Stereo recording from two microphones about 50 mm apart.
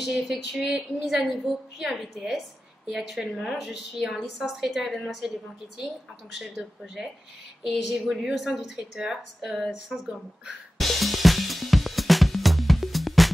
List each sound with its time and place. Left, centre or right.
0.0 s a woman's voice: centre
6.3 s a woman's voice: centre
7.6 s a sound: centre